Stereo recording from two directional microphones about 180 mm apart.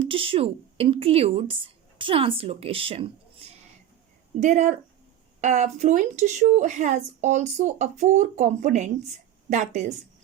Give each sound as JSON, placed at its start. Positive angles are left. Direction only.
{"t": 0.0, "sound": "a woman's voice", "side_deg": -30}
{"t": 4.4, "sound": "a woman's voice", "side_deg": -40}